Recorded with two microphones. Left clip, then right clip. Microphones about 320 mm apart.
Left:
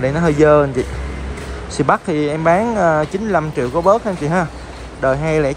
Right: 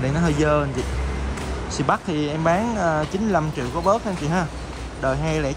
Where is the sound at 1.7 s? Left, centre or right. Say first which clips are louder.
Left 7 dB; centre.